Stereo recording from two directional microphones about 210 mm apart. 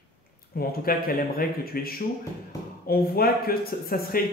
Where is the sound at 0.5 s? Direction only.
45° left (ahead or behind).